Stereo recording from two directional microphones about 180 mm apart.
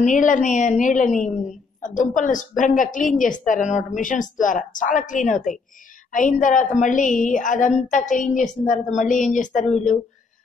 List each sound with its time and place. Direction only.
0.0 s a woman's voice: 45° left (ahead or behind)